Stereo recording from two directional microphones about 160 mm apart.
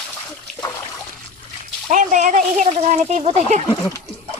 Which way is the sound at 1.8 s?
50° right (ahead or behind).